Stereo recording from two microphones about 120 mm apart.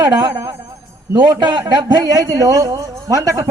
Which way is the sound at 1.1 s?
40° right (ahead or behind).